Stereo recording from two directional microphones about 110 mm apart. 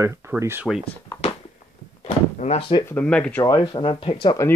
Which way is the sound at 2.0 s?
85° left.